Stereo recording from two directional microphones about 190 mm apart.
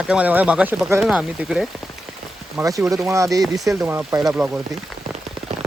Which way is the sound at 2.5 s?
15° right (ahead or behind).